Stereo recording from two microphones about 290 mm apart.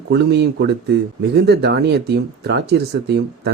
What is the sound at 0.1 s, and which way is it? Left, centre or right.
Speech, right.